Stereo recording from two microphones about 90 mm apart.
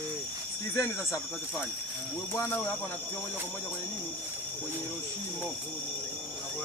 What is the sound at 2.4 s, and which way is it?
Speech, 25° left (ahead or behind).